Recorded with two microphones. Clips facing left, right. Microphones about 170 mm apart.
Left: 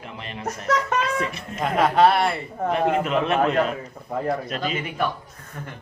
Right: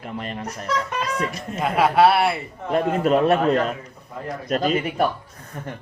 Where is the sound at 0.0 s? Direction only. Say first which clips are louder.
Right 5 dB; 45° right (ahead or behind).